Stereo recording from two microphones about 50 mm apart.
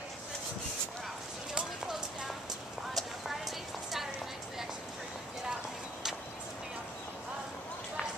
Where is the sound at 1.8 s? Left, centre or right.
Centre.